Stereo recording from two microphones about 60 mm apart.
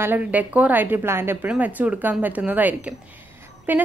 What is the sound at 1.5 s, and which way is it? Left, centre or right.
A woman's voice, right.